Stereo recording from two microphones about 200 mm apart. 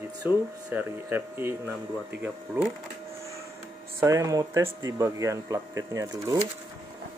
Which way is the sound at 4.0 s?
15° right (ahead or behind).